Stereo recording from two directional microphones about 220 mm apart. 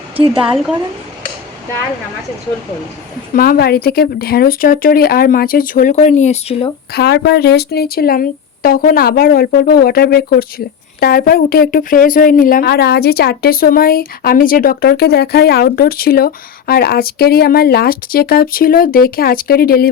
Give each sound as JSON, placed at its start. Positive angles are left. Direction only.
{"t": 0.3, "sound": "a woman's voice", "side_deg": -5}
{"t": 3.3, "sound": "speech", "side_deg": 40}
{"t": 6.9, "sound": "speech", "side_deg": 45}